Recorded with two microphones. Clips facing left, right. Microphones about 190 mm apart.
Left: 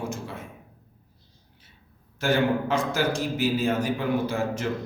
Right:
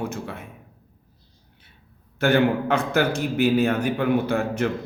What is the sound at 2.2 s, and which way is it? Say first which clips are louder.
A man's voice: right 4 dB; 60° right (ahead or behind).